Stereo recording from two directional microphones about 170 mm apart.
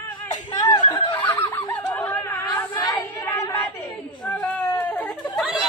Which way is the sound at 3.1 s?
20° left (ahead or behind).